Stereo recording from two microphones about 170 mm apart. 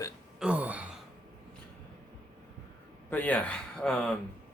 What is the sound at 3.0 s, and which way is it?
Speech, 10° left (ahead or behind).